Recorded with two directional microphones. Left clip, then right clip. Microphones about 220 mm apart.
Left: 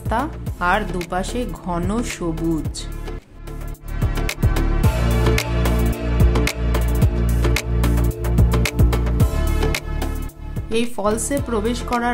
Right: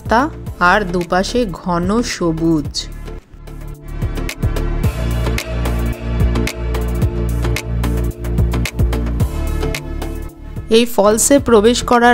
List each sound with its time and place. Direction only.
0.1 s speech: 30° right (ahead or behind)
4.1 s music: centre (ahead or behind)
10.7 s a woman's voice: 35° right (ahead or behind)